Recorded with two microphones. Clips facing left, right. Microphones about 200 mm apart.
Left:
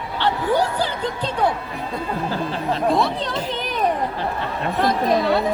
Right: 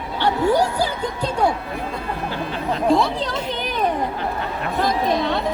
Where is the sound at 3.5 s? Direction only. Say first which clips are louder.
Left 1 dB; centre (ahead or behind).